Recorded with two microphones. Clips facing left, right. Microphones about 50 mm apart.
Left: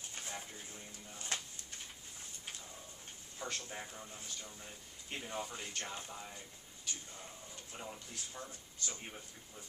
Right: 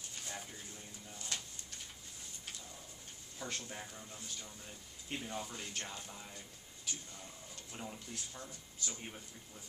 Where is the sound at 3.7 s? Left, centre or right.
Left.